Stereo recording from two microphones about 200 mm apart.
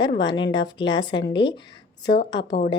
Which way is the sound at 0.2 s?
20° left (ahead or behind).